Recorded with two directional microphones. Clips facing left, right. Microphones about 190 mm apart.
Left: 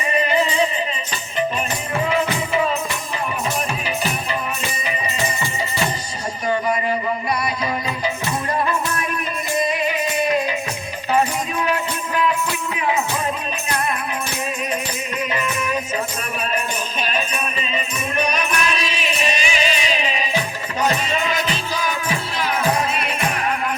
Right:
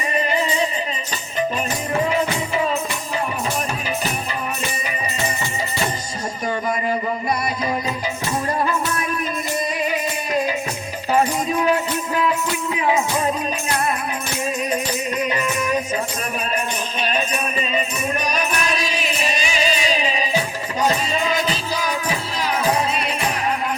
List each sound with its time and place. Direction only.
15.2 s music: 35° right (ahead or behind)
17.1 s music: 40° right (ahead or behind)
23.0 s music: 35° right (ahead or behind)